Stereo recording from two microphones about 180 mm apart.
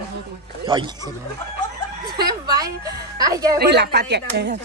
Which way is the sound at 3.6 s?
65° right (ahead or behind).